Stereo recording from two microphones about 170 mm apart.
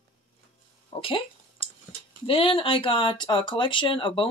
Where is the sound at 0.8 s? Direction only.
30° left (ahead or behind).